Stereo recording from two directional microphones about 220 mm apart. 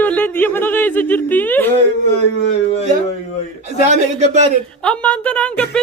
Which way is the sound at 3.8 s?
30° right (ahead or behind).